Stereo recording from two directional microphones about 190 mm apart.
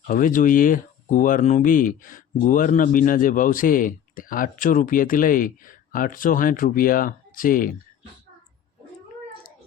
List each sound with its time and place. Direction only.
0.1 s speech: 45° left (ahead or behind)